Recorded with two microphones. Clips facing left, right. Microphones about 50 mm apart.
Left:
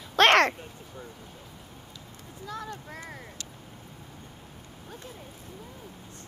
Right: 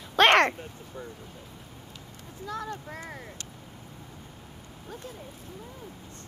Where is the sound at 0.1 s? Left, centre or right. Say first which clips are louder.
Even; centre.